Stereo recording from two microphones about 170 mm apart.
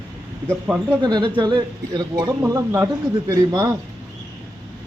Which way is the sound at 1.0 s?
25° right (ahead or behind).